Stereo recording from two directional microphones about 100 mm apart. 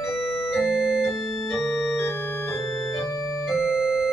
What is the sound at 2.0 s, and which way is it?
Organ, 20° left (ahead or behind).